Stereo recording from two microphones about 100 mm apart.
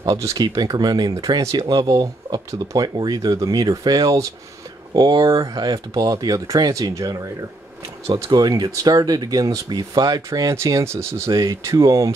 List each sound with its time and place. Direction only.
0.0 s speech: 35° right (ahead or behind)
8.3 s speech: 45° right (ahead or behind)
10.5 s speech: 30° right (ahead or behind)